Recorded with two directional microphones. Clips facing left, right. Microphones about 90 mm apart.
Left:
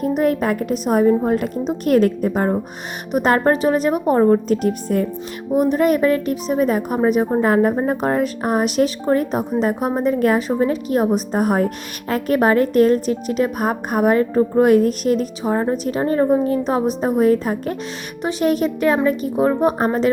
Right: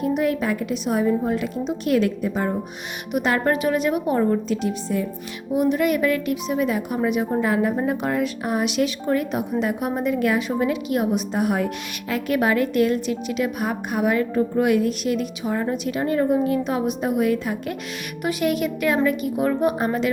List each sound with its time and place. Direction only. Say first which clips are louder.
0.2 s a woman's voice: left 4 dB; 45° left (ahead or behind)
5.5 s a woman's voice: left 4 dB; 40° left (ahead or behind)